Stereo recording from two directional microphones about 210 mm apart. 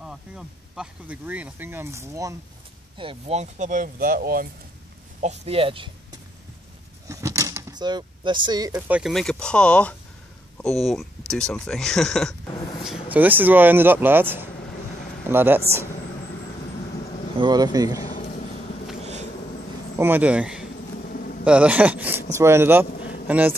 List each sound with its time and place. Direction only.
0.0 s speech: 5° right (ahead or behind)
3.0 s speech: 25° right (ahead or behind); by 4.5 s 45° right (ahead or behind)
5.2 s speech: 30° right (ahead or behind)
7.1 s speech: 15° right (ahead or behind)
17.4 s speech: 20° right (ahead or behind)
18.0 s a sound: 40° left (ahead or behind)
20.0 s speech: 10° right (ahead or behind)
21.1 s a sound: 40° left (ahead or behind)
21.5 s speech: 5° right (ahead or behind)